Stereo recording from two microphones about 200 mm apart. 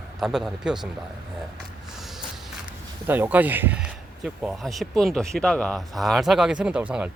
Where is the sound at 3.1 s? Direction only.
10° right (ahead or behind).